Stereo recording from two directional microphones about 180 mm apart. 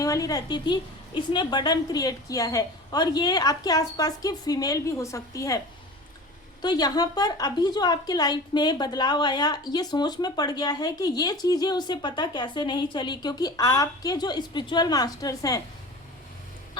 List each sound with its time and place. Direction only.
0.0 s a woman's voice: 20° left (ahead or behind)
6.6 s a woman's voice: 20° left (ahead or behind)